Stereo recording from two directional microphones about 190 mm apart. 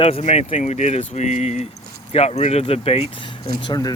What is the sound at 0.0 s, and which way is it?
Speech, 35° left (ahead or behind).